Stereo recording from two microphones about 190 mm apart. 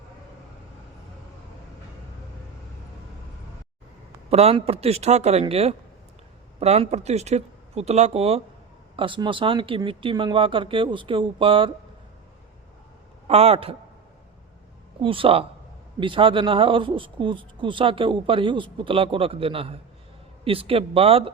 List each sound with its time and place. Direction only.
4.3 s speech: 30° right (ahead or behind)
13.2 s speech: 30° right (ahead or behind)
15.0 s speech: 30° right (ahead or behind)